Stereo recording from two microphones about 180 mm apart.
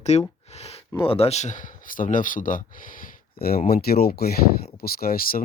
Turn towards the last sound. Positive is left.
turn(degrees=55)  # may be behind; listen again after turning